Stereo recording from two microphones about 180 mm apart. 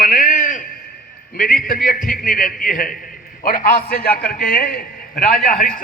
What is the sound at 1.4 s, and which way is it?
A man's voice, 50° left (ahead or behind).